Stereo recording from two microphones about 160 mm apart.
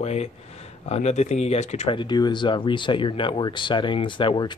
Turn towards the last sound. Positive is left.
turn(degrees=30)  # may be behind; listen again after turning